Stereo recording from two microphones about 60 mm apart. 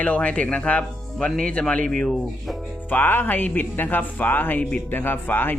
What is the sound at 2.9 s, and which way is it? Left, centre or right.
Speech, left.